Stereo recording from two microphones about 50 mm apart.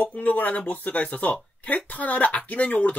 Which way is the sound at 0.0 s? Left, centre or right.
Left.